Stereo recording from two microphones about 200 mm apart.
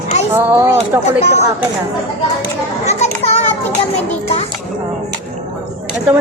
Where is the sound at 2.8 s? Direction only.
35° left (ahead or behind).